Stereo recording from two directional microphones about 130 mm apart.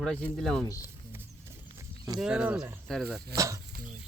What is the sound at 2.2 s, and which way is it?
Speech, 5° right (ahead or behind).